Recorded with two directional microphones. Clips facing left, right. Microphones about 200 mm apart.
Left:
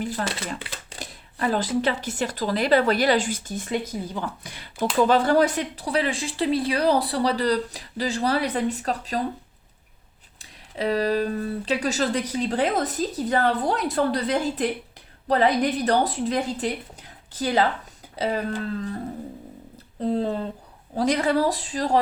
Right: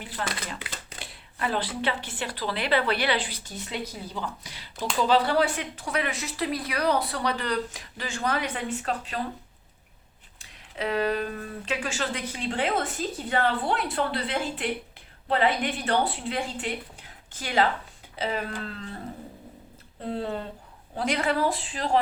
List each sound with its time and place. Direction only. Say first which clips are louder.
0.0 s speech: left 7 dB; 40° left (ahead or behind)
0.3 s speech: left 4 dB; 30° left (ahead or behind)
0.9 s speech: left 8 dB; 40° left (ahead or behind)
10.3 s speech: left 4 dB; 35° left (ahead or behind)
18.2 s speech: left 4 dB; 35° left (ahead or behind)
20.0 s speech: left 6 dB; 35° left (ahead or behind)